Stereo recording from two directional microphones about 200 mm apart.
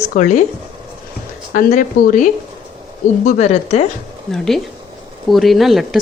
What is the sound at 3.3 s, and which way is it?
Speech, 35° left (ahead or behind).